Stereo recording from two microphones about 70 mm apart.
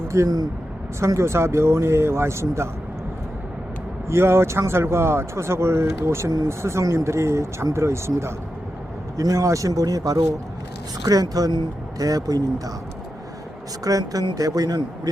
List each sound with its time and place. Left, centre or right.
0.1 s speech: right
0.9 s speech: right
4.1 s speech: right
13.8 s speech: right